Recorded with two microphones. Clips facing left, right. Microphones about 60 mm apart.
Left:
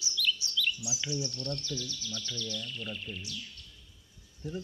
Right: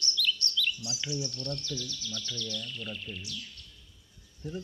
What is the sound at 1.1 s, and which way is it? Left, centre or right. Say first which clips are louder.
Speech: even; centre.